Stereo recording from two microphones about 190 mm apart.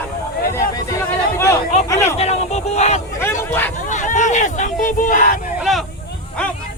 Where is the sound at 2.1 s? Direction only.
35° left (ahead or behind).